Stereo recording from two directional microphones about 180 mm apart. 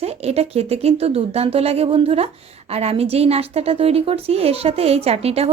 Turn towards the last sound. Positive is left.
turn(degrees=-35)  # may be behind; listen again after turning